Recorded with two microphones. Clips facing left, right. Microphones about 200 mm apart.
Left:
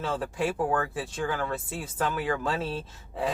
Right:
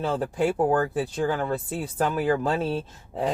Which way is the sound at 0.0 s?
35° right (ahead or behind).